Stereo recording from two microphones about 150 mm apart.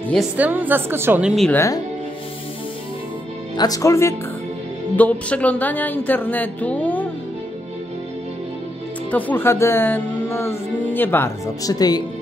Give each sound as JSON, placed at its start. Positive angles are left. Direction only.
{"t": 0.4, "sound": "a woman's voice", "side_deg": -10}
{"t": 1.5, "sound": "speech", "side_deg": 20}
{"t": 3.5, "sound": "speech", "side_deg": 25}
{"t": 4.9, "sound": "speech", "side_deg": 10}
{"t": 9.1, "sound": "speech", "side_deg": 15}